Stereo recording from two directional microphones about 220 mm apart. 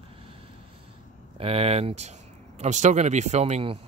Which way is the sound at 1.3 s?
25° right (ahead or behind).